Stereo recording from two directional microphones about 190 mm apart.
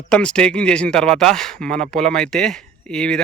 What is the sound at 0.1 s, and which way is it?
Speech, 5° left (ahead or behind).